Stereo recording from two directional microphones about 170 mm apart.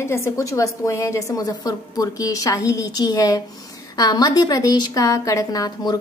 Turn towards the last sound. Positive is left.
turn(degrees=20)  # may be behind; listen again after turning